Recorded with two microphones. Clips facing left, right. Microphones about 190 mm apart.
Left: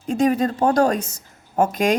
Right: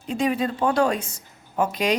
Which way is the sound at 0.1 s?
45° left (ahead or behind).